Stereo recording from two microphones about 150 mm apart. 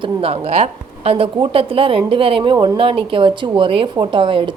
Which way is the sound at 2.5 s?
20° right (ahead or behind).